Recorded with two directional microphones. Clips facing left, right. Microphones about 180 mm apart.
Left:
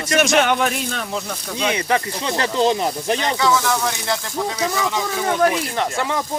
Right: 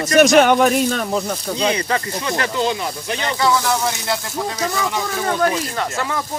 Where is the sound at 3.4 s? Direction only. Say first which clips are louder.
Right 3 dB; 15° right (ahead or behind).